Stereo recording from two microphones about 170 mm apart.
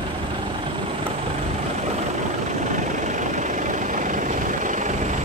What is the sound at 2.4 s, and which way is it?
Vehicle, 45° right (ahead or behind).